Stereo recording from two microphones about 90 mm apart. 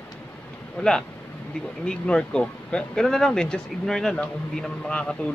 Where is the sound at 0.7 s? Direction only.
5° left (ahead or behind).